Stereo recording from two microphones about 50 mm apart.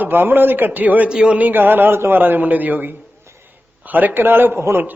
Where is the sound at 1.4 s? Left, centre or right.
Right.